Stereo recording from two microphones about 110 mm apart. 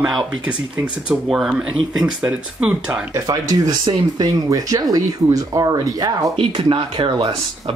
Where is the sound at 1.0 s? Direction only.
5° right (ahead or behind).